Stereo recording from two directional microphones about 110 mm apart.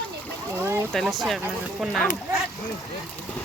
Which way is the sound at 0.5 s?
25° right (ahead or behind).